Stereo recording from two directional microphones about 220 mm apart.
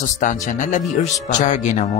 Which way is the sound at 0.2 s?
35° left (ahead or behind).